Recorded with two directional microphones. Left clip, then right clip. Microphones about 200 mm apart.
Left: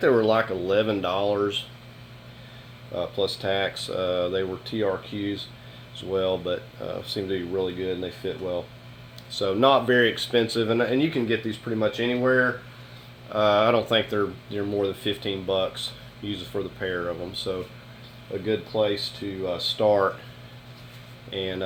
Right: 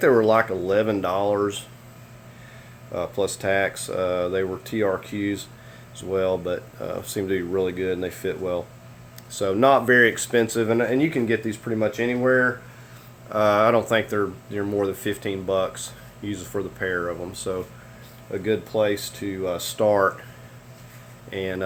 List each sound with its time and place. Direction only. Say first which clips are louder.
0.0 s speech: right 3 dB; 25° right (ahead or behind)
2.9 s speech: right 1 dB; 35° right (ahead or behind)
6.0 s speech: right 2 dB; 25° right (ahead or behind)
7.0 s speech: right 3 dB; 40° right (ahead or behind)
9.3 s speech: right 2 dB; 25° right (ahead or behind)
13.3 s speech: right 2 dB; 35° right (ahead or behind)
13.9 s speech: right 1 dB; 15° right (ahead or behind)
21.2 s speech: right 1 dB; 25° right (ahead or behind)